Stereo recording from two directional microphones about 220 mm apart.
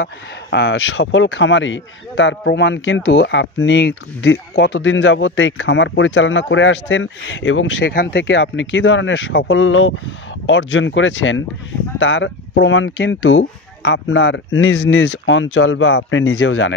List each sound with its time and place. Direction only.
0.0 s speech: 50° left (ahead or behind)